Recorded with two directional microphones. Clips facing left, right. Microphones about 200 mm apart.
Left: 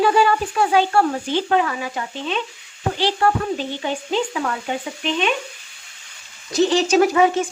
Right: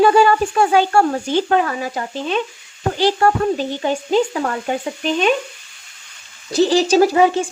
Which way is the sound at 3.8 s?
40° right (ahead or behind).